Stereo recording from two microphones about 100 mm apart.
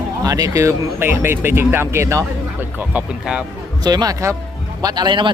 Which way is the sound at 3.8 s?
40° right (ahead or behind).